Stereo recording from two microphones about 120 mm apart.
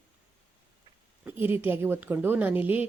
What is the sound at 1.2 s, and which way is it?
A woman's voice, 15° right (ahead or behind).